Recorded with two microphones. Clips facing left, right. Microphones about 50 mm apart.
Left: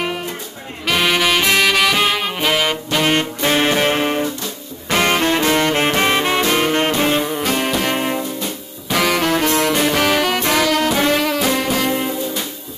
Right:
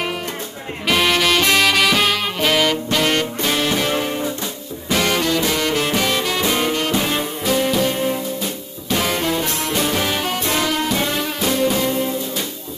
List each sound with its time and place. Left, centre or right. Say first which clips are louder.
0.8 s saxophone: even; centre
3.4 s music: left 6 dB; left
7.4 s music: right 1 dB; left
8.9 s music: left 3 dB; left
10.5 s brass instrument: left 3 dB; left
11.0 s music: left 5 dB; left